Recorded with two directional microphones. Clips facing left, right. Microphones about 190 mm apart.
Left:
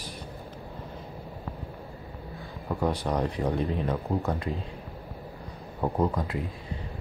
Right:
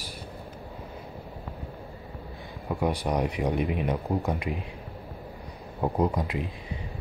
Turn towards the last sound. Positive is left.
turn(degrees=-15)  # may be behind; listen again after turning